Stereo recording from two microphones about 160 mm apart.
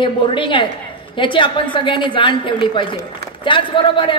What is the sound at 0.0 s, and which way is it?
A woman's voice, 30° left (ahead or behind).